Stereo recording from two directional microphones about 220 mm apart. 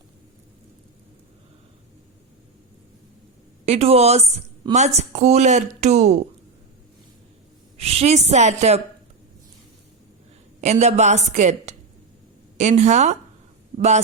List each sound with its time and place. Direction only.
3.7 s a woman's voice: 25° right (ahead or behind)
7.8 s speech: 25° right (ahead or behind)
10.6 s speech: 30° right (ahead or behind)